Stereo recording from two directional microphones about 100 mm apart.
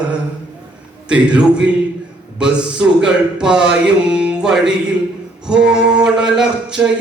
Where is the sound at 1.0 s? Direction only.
10° right (ahead or behind).